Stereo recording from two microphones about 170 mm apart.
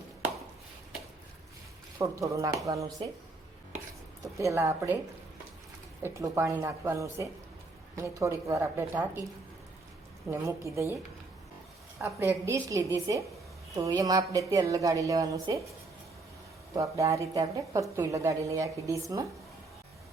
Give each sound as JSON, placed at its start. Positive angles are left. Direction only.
{"t": 2.0, "sound": "a woman's voice", "side_deg": -20}
{"t": 4.2, "sound": "a woman's voice", "side_deg": -15}
{"t": 6.0, "sound": "speech", "side_deg": -15}
{"t": 10.2, "sound": "speech", "side_deg": -15}
{"t": 12.0, "sound": "a woman's voice", "side_deg": -15}
{"t": 16.7, "sound": "a woman's voice", "side_deg": -20}